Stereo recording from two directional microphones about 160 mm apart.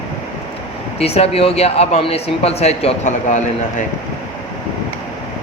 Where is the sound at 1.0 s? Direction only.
40° left (ahead or behind).